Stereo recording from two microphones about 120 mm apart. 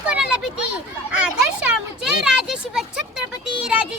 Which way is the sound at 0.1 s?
10° right (ahead or behind).